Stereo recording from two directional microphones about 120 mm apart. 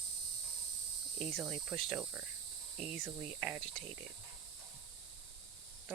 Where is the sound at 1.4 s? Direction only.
5° right (ahead or behind).